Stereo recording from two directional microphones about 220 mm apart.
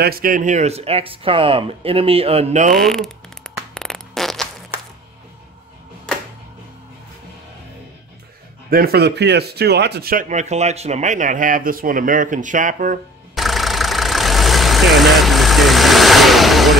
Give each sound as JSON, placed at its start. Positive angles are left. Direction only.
{"t": 0.0, "sound": "speech", "side_deg": -40}
{"t": 2.7, "sound": "fart", "side_deg": 0}
{"t": 8.6, "sound": "a man's voice", "side_deg": -40}
{"t": 13.3, "sound": "vehicle", "side_deg": 0}